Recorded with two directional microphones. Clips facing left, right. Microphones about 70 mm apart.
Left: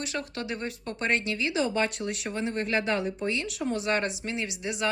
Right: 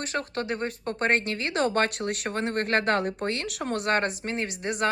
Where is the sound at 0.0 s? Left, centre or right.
Right.